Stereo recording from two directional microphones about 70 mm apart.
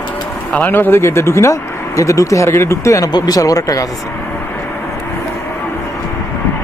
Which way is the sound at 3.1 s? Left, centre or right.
Left.